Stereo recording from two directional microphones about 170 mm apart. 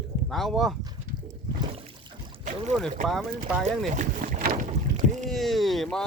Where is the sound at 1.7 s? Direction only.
35° right (ahead or behind).